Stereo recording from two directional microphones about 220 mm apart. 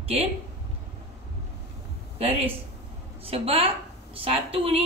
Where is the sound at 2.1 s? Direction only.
25° right (ahead or behind).